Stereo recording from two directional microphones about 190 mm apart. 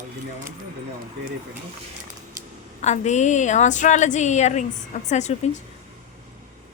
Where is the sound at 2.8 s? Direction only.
35° left (ahead or behind).